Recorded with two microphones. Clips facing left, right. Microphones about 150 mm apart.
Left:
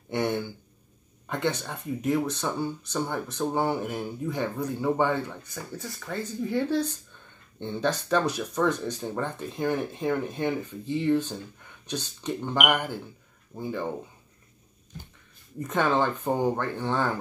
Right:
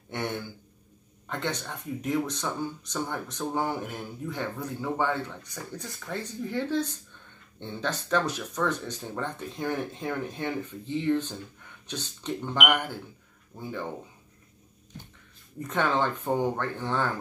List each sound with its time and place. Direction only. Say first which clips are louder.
0.1 s a sound: left 5 dB; 10° left (ahead or behind)
1.3 s speech: left 4 dB; 10° left (ahead or behind)
6.5 s speech: left 2 dB; 10° left (ahead or behind)
15.6 s speech: left 2 dB; 10° left (ahead or behind)